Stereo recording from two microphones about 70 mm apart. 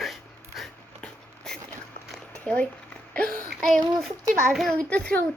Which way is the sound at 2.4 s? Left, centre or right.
Centre.